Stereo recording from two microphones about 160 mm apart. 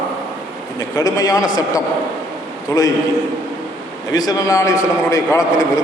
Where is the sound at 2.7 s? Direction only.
15° left (ahead or behind).